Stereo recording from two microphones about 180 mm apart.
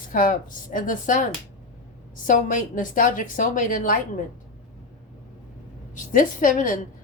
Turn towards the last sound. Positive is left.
turn(degrees=45)  # may be behind; listen again after turning